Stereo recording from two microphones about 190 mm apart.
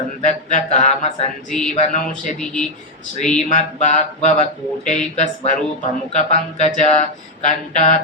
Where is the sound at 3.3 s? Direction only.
40° left (ahead or behind).